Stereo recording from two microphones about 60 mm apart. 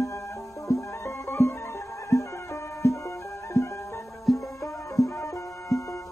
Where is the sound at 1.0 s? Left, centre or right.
Left.